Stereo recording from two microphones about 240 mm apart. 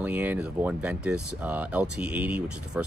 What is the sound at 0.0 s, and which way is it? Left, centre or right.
Speech, centre.